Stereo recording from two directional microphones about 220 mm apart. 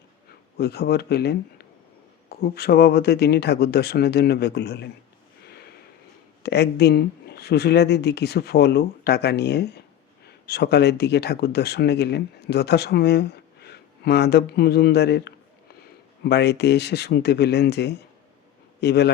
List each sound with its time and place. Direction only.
0.5 s speech: 45° left (ahead or behind)
6.4 s speech: 50° left (ahead or behind)